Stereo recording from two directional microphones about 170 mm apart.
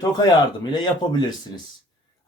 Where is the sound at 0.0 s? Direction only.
25° left (ahead or behind).